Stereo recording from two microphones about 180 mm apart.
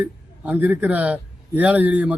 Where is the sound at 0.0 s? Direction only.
10° right (ahead or behind).